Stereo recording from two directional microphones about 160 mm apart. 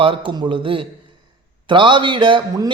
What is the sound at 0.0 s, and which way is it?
Speech, 35° right (ahead or behind).